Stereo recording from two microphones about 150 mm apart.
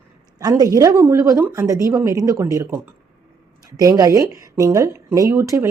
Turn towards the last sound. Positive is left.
turn(degrees=-20)  # may be behind; listen again after turning